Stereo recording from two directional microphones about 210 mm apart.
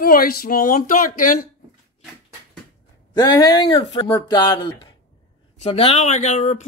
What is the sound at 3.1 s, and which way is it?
Speech, 20° left (ahead or behind).